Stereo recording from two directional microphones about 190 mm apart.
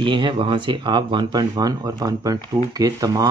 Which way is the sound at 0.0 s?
25° right (ahead or behind).